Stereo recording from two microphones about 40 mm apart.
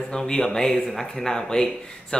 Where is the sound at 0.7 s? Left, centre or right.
Centre.